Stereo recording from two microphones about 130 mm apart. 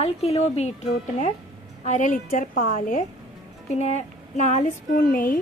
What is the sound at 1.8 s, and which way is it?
A woman's voice, 75° left (ahead or behind).